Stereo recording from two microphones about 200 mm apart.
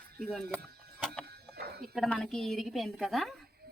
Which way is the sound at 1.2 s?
50° right (ahead or behind).